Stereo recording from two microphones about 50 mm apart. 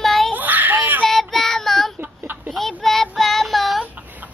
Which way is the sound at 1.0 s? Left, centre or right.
Centre.